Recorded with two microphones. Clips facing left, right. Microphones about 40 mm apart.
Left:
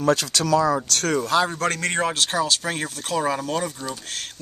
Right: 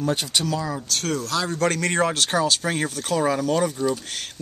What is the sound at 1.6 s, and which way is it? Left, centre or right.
Speech, centre.